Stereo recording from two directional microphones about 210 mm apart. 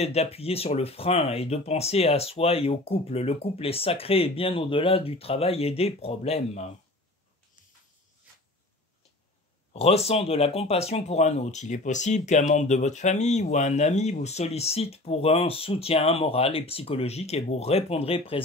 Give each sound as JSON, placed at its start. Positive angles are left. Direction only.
{"t": 0.0, "sound": "speech", "side_deg": 30}
{"t": 9.7, "sound": "speech", "side_deg": 30}